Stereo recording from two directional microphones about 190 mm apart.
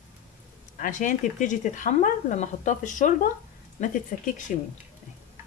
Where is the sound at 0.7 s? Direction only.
45° left (ahead or behind).